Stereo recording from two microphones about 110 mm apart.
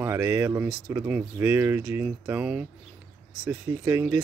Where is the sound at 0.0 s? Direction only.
25° right (ahead or behind).